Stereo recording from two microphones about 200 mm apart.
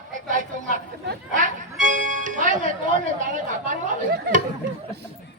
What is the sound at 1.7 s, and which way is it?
Music, 40° right (ahead or behind).